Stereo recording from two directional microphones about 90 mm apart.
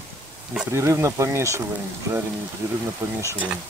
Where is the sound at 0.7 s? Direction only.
30° right (ahead or behind).